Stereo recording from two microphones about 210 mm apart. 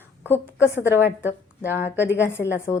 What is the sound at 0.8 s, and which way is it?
Speech, 10° right (ahead or behind).